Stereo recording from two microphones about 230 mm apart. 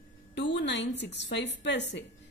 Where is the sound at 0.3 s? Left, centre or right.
Left.